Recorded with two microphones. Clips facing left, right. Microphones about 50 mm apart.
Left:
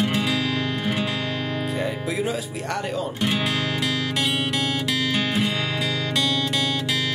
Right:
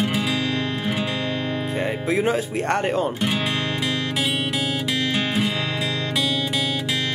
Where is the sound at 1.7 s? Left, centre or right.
Right.